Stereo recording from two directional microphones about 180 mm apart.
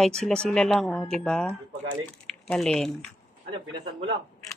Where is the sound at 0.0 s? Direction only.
5° left (ahead or behind).